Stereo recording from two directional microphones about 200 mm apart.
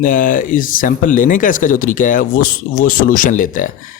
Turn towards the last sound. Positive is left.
turn(degrees=40)  # may be behind; listen again after turning